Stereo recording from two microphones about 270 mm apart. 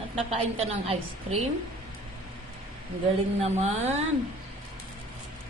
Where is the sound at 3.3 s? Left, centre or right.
Right.